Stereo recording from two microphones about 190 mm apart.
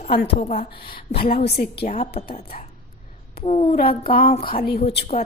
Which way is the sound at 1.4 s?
55° left (ahead or behind).